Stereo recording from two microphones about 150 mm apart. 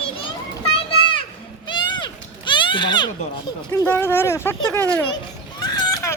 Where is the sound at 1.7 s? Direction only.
30° left (ahead or behind).